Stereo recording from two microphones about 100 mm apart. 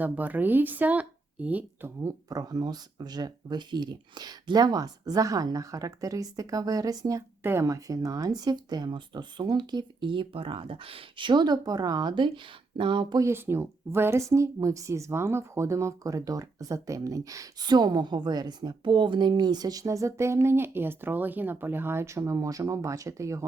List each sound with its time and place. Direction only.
0.0 s speech: 15° right (ahead or behind)
2.0 s a woman's voice: 40° right (ahead or behind)
13.1 s a woman's voice: 25° right (ahead or behind)